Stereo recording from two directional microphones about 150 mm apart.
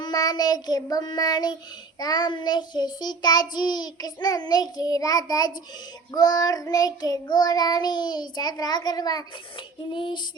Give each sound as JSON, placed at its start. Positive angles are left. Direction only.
{"t": 0.0, "sound": "child singing", "side_deg": 25}
{"t": 9.9, "sound": "female singing", "side_deg": 30}